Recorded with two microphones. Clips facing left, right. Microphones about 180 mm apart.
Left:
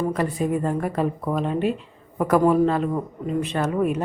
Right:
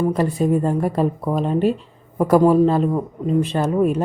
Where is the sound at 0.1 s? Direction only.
30° right (ahead or behind).